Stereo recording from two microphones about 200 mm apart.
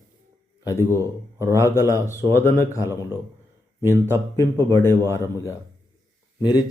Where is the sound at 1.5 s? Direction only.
15° left (ahead or behind).